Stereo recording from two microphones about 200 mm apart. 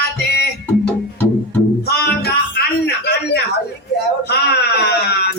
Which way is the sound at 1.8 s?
55° left (ahead or behind).